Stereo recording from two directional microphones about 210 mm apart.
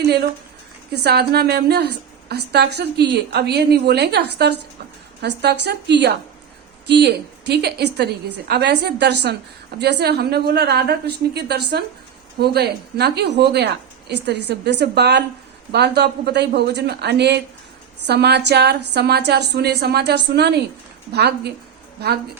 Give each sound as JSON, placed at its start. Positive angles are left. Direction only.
{"t": 1.0, "sound": "a woman's voice", "side_deg": -50}